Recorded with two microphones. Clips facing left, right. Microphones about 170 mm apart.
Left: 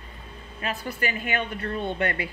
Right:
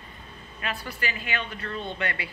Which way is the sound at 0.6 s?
45° left (ahead or behind).